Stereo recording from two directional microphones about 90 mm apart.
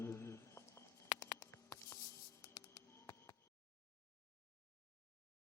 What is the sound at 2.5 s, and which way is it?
Bird, 35° left (ahead or behind).